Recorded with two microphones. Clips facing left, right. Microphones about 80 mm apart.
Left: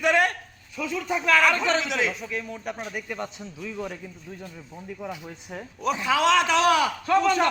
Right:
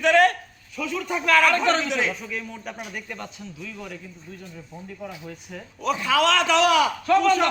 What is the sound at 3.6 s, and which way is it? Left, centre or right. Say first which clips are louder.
Speech: left 6 dB; left.